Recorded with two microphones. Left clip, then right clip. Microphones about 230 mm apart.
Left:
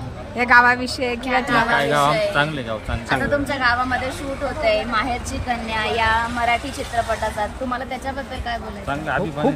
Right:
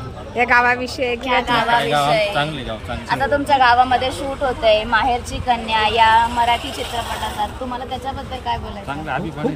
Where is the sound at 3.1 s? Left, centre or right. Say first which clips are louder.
Right 4 dB; centre.